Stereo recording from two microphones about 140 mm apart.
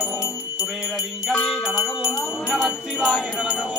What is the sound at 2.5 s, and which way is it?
Music, 5° right (ahead or behind).